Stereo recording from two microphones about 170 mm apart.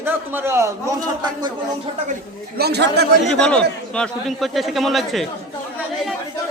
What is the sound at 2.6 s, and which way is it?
Speech, 75° right (ahead or behind).